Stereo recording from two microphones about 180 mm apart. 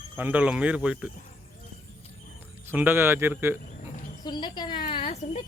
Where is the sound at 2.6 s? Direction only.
10° right (ahead or behind).